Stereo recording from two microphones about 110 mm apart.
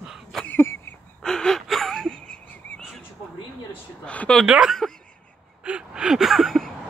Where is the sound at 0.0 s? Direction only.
Centre (ahead or behind).